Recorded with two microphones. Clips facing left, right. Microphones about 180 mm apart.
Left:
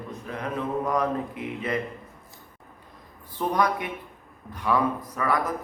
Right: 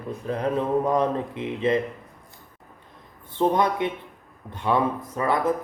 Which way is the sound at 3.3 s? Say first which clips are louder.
Right 3 dB; 25° right (ahead or behind).